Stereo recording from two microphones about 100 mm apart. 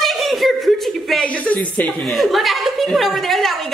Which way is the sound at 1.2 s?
15° left (ahead or behind).